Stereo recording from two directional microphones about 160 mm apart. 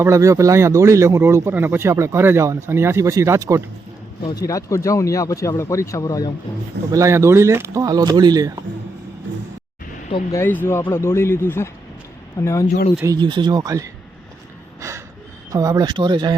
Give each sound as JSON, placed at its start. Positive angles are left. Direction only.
{"t": 0.0, "sound": "speech", "side_deg": -20}
{"t": 4.2, "sound": "speech", "side_deg": 25}
{"t": 6.9, "sound": "speech", "side_deg": -20}
{"t": 10.3, "sound": "speech", "side_deg": 15}
{"t": 13.1, "sound": "speech", "side_deg": -30}
{"t": 14.8, "sound": "gasp", "side_deg": -20}
{"t": 15.5, "sound": "speech", "side_deg": -25}